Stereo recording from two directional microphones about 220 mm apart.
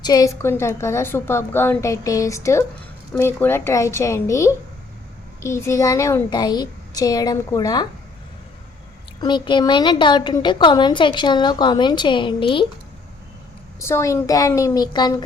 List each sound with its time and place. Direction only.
0.0 s a woman's voice: 15° left (ahead or behind)
9.2 s a woman's voice: 20° left (ahead or behind)
13.7 s a woman's voice: 10° left (ahead or behind)